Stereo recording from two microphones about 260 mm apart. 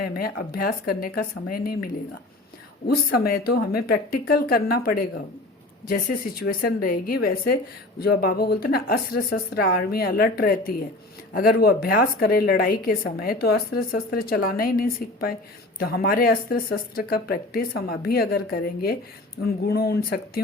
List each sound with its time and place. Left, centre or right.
0.0 s speech: left
2.8 s speech: left